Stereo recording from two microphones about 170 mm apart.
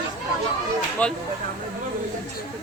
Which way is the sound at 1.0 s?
10° left (ahead or behind).